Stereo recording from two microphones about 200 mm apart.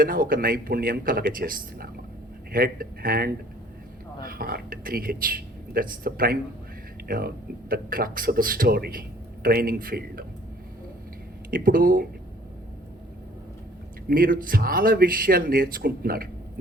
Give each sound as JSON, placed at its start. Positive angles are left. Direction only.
{"t": 0.0, "sound": "speech", "side_deg": -45}
{"t": 11.5, "sound": "speech", "side_deg": -45}
{"t": 14.1, "sound": "speech", "side_deg": -45}